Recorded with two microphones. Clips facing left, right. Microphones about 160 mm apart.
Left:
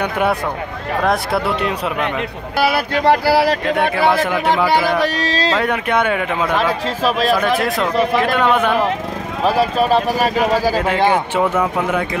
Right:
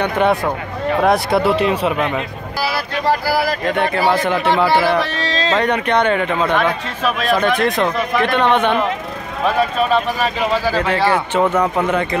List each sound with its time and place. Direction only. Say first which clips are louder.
0.0 s speech: right 2 dB; 5° left (ahead or behind)
2.6 s speech: left 4 dB; 60° left (ahead or behind)
4.1 s speech: even; 10° left (ahead or behind)
5.0 s speech: left 3 dB; 40° left (ahead or behind)
5.5 s speech: right 4 dB; 5° left (ahead or behind)
7.0 s speech: left 2 dB; 35° left (ahead or behind)
7.3 s speech: right 1 dB; 5° left (ahead or behind)
9.4 s speech: left 1 dB; 35° left (ahead or behind)
10.7 s speech: left 1 dB; 10° left (ahead or behind)